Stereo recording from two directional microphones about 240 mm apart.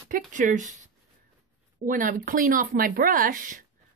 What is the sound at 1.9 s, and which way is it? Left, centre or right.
A woman's voice, right.